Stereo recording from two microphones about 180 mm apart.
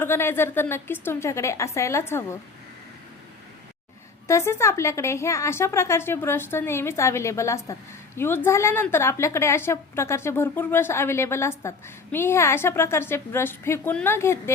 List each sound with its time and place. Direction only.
0.0 s a woman's voice: 15° left (ahead or behind)
4.3 s a woman's voice: 15° left (ahead or behind)